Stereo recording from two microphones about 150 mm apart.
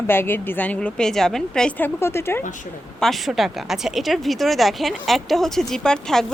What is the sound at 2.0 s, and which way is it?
Speech, 15° left (ahead or behind).